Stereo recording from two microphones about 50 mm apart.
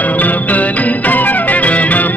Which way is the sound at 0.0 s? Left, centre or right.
Left.